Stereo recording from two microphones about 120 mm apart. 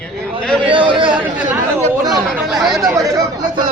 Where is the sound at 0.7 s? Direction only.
45° right (ahead or behind).